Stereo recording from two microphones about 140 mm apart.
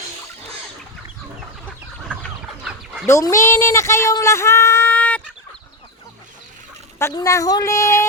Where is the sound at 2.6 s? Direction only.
5° right (ahead or behind).